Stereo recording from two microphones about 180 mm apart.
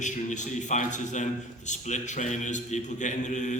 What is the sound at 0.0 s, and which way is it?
A man's voice, 40° left (ahead or behind).